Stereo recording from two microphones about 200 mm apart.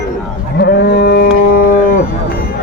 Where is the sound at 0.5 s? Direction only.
55° left (ahead or behind).